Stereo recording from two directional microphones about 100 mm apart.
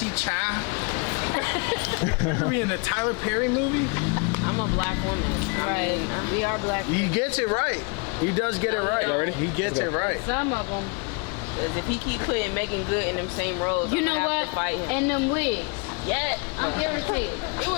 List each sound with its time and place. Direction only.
0.0 s vehicle: 20° left (ahead or behind)
1.2 s speech: 25° left (ahead or behind)
11.6 s speech: 25° left (ahead or behind)